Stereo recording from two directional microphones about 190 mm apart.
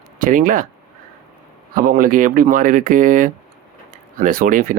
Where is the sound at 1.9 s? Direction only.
45° right (ahead or behind).